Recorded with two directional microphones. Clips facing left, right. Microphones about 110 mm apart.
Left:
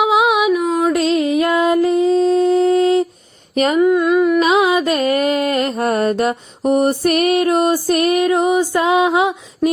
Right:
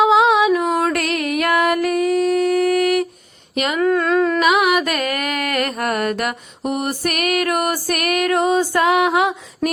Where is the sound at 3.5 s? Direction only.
35° left (ahead or behind).